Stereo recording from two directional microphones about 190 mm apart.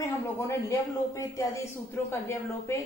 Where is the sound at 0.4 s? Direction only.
15° left (ahead or behind).